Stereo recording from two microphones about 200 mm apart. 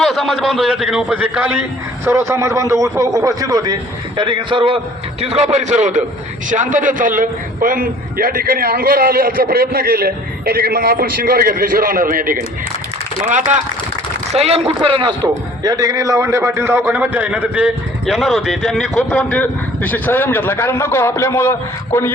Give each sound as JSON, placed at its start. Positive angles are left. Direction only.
{"t": 0.0, "sound": "a man's voice", "side_deg": 0}